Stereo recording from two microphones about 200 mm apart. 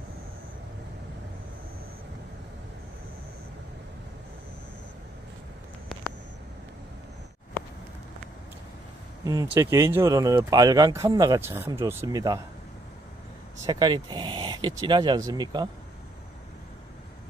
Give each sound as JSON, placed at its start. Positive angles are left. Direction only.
{"t": 9.2, "sound": "speech", "side_deg": -15}
{"t": 13.7, "sound": "speech", "side_deg": -20}